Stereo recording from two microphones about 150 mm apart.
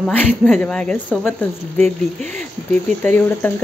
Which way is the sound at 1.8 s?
55° right (ahead or behind).